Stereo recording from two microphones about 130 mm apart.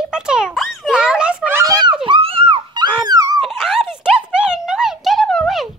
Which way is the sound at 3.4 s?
5° right (ahead or behind).